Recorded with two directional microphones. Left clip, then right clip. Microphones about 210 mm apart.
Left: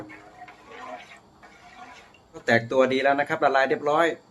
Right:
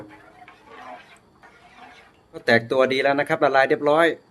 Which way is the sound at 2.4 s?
40° right (ahead or behind).